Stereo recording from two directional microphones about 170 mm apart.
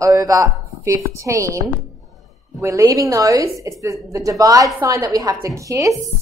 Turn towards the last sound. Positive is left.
turn(degrees=-20)  # may be behind; listen again after turning